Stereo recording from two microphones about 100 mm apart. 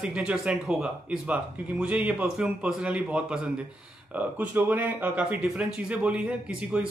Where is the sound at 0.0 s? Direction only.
10° right (ahead or behind).